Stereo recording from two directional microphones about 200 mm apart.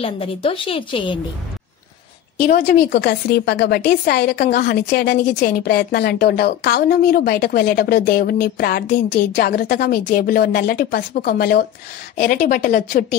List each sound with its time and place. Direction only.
0.0 s a woman's voice: 25° left (ahead or behind)
2.5 s a woman's voice: 55° left (ahead or behind)